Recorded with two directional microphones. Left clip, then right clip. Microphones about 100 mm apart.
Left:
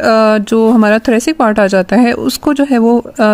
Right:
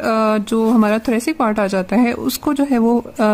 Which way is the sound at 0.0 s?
35° left (ahead or behind).